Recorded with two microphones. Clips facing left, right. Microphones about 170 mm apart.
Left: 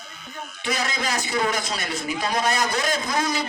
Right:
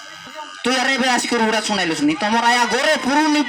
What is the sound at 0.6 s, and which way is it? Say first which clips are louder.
A man's voice: right 8 dB; 70° right (ahead or behind).